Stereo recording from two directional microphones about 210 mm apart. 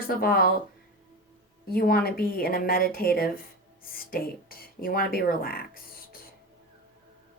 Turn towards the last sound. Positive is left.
turn(degrees=45)  # may be behind; listen again after turning